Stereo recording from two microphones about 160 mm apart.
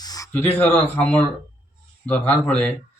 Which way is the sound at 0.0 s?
25° left (ahead or behind).